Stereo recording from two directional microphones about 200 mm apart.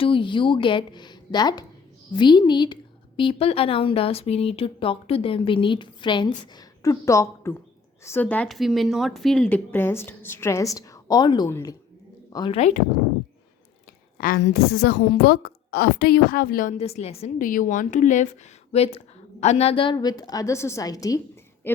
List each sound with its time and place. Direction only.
0.0 s a woman's voice: 25° left (ahead or behind)
14.2 s a woman's voice: 45° left (ahead or behind); by 21.2 s 15° left (ahead or behind)